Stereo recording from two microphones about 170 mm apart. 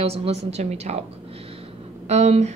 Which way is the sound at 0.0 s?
35° right (ahead or behind).